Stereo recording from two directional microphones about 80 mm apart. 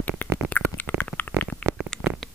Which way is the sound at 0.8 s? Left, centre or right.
Left.